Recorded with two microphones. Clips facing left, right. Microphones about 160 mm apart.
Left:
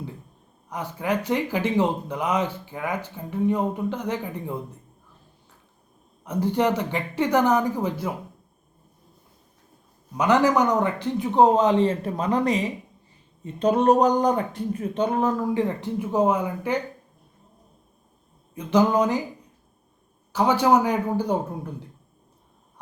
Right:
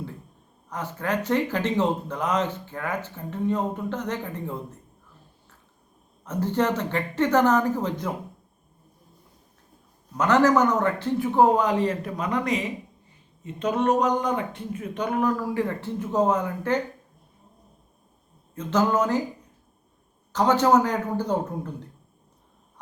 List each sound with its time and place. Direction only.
0.7 s speech: 15° left (ahead or behind)
6.2 s speech: 10° left (ahead or behind)
10.2 s speech: 15° left (ahead or behind)
18.5 s speech: 15° left (ahead or behind)
20.3 s speech: 10° left (ahead or behind)